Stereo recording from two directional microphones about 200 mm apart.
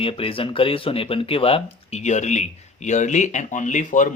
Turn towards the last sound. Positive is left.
turn(degrees=40)  # may be behind; listen again after turning